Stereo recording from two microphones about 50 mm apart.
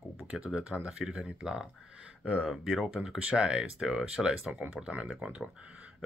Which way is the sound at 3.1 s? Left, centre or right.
Right.